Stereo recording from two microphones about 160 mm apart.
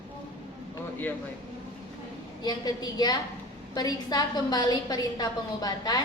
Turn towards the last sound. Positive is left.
turn(degrees=25)  # may be behind; listen again after turning